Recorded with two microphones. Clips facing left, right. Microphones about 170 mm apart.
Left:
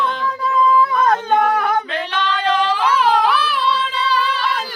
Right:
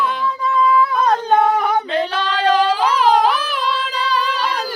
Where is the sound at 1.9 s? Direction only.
30° right (ahead or behind).